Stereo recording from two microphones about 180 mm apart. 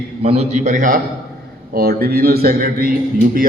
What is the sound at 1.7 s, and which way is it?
A man's voice, 55° right (ahead or behind).